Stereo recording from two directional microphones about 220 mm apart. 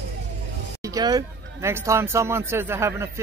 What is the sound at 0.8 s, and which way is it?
Speech, 15° right (ahead or behind).